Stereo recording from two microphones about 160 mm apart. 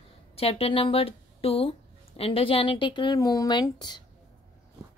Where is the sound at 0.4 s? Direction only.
40° left (ahead or behind).